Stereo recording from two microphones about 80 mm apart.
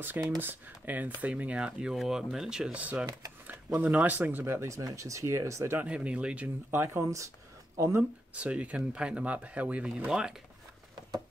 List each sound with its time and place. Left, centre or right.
0.4 s speech: right
4.6 s speech: right
5.8 s speech: centre
6.7 s speech: right
8.4 s speech: centre